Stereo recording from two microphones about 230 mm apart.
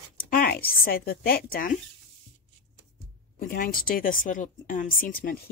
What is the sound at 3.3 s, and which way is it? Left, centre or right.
Speech, left.